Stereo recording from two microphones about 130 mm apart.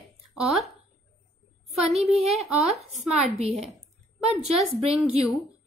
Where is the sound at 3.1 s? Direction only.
55° right (ahead or behind).